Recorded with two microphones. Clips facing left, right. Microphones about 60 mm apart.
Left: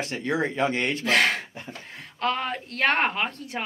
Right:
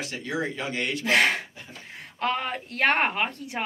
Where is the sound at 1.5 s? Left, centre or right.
Left.